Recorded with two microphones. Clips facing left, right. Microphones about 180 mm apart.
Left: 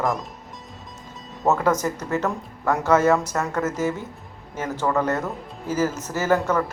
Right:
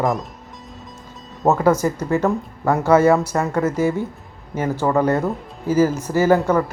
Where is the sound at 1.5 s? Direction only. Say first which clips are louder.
Right 4 dB; 10° right (ahead or behind).